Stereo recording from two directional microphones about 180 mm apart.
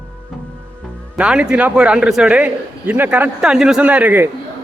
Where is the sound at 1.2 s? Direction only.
5° right (ahead or behind).